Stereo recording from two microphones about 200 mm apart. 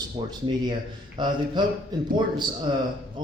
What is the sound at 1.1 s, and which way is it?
A man's voice, 20° right (ahead or behind).